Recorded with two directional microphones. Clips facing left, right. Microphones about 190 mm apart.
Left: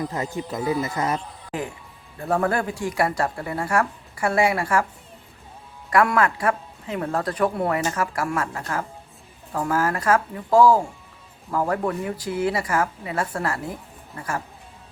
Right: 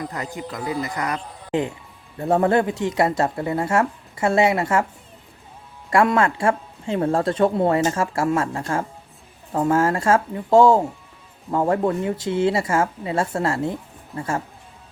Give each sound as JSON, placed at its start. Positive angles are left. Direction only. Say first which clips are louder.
{"t": 0.3, "sound": "speech", "louder": "left 2 dB", "side_deg": 20}
{"t": 1.5, "sound": "speech", "louder": "right 9 dB", "side_deg": -25}
{"t": 5.9, "sound": "speech", "louder": "right 2 dB", "side_deg": -25}